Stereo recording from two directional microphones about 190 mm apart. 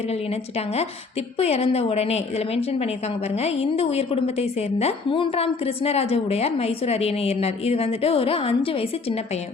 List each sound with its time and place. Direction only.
0.1 s a woman's voice: 35° left (ahead or behind)